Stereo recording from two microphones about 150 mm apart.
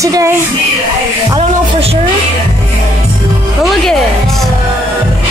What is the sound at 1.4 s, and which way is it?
Music, 40° right (ahead or behind).